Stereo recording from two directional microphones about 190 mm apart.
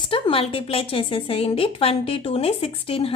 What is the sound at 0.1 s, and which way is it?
A woman's voice, 30° left (ahead or behind).